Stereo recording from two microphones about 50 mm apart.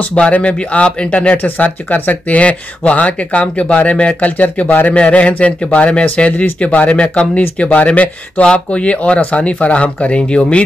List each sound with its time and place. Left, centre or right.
0.0 s speech: left
4.6 s a man's voice: left
4.9 s speech: left